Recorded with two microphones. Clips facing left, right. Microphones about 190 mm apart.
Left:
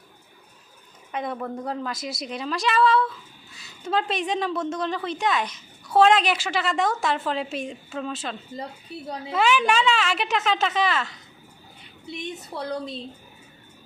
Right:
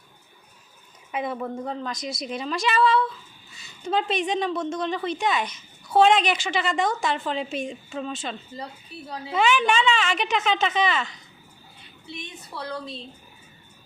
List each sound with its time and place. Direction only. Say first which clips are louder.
1.1 s a woman's voice: right 1 dB; 5° right (ahead or behind)
12.5 s a woman's voice: left 3 dB; 20° left (ahead or behind)